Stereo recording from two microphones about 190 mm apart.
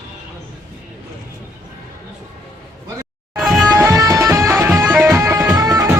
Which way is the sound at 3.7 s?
15° right (ahead or behind).